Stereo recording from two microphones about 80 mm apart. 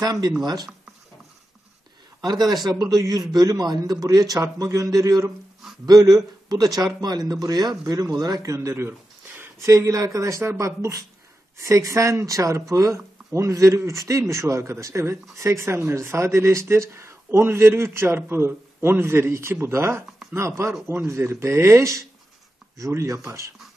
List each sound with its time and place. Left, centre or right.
0.0 s a man's voice: right
2.2 s a man's voice: right
9.7 s a man's voice: right